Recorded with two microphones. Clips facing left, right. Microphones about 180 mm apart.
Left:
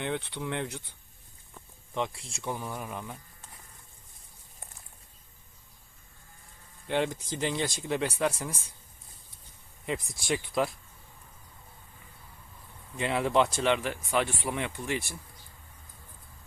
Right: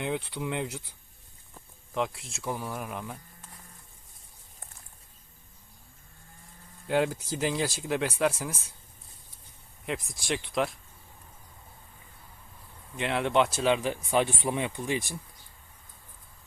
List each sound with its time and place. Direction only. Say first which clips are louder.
0.0 s speech: right 1 dB; 5° right (ahead or behind)
6.8 s speech: right 3 dB; 5° right (ahead or behind)
9.8 s speech: even; centre (ahead or behind)
13.0 s speech: even; centre (ahead or behind); by 15.1 s 15° right (ahead or behind)